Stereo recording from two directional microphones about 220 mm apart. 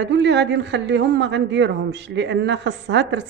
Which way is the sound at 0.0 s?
55° right (ahead or behind).